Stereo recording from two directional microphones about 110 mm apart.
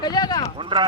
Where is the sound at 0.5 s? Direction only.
45° right (ahead or behind).